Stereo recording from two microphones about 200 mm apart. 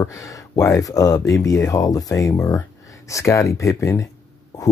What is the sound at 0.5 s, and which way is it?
Speech, 15° left (ahead or behind).